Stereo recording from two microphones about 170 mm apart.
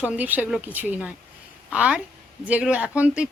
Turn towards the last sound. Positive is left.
turn(degrees=-5)  # may be behind; listen again after turning